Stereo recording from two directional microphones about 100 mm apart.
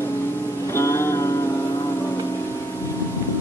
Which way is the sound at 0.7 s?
30° left (ahead or behind).